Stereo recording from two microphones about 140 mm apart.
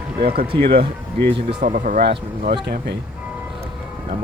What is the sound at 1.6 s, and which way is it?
Speech, 65° right (ahead or behind).